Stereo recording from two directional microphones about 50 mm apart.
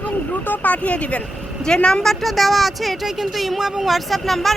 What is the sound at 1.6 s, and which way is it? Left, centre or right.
Speech, centre.